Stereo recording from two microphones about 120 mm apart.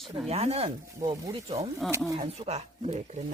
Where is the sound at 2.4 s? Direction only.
60° right (ahead or behind).